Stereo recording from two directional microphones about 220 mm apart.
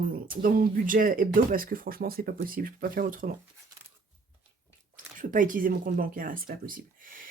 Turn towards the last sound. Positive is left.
turn(degrees=-40)  # may be behind; listen again after turning